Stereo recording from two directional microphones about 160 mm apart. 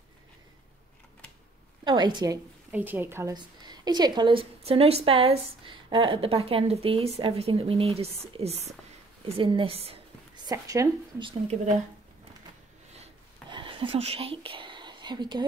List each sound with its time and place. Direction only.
1.9 s speech: 25° right (ahead or behind)
2.7 s a woman's voice: 10° right (ahead or behind)
3.3 s a woman's voice: 25° right (ahead or behind)
10.4 s speech: 20° right (ahead or behind)
13.5 s whispering: 30° right (ahead or behind)